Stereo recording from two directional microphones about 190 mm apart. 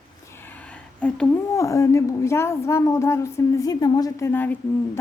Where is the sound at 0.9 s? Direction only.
5° left (ahead or behind).